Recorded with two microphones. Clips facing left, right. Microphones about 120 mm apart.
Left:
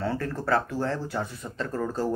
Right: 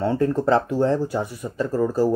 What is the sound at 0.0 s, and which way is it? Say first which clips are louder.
Speech: right 9 dB; 20° right (ahead or behind).